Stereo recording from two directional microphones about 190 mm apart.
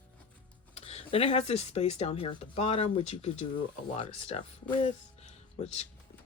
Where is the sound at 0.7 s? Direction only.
35° left (ahead or behind).